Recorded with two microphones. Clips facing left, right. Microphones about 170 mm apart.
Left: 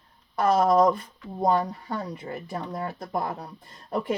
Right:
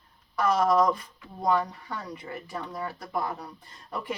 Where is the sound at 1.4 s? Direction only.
35° left (ahead or behind).